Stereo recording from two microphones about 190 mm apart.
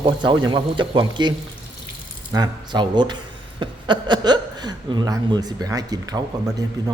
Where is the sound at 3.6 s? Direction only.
25° right (ahead or behind).